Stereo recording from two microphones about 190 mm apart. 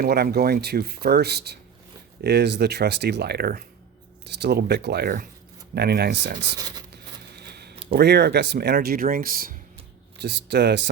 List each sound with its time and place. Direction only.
0.0 s speech: 55° right (ahead or behind)
6.6 s speech: 20° right (ahead or behind)
6.9 s a sound: 60° right (ahead or behind)
7.9 s speech: 60° right (ahead or behind)
10.2 s speech: 65° right (ahead or behind)